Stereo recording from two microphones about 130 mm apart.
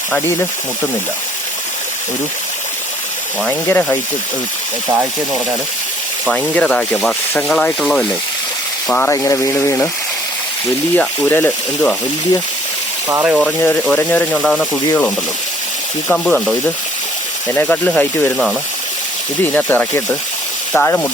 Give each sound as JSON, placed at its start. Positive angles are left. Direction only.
{"t": 3.7, "sound": "speech", "side_deg": 15}
{"t": 6.2, "sound": "speech", "side_deg": 10}
{"t": 8.9, "sound": "speech", "side_deg": 20}
{"t": 10.9, "sound": "speech", "side_deg": 15}
{"t": 13.1, "sound": "speech", "side_deg": -20}
{"t": 13.6, "sound": "speech", "side_deg": 15}
{"t": 16.0, "sound": "speech", "side_deg": 10}
{"t": 19.5, "sound": "speech", "side_deg": 15}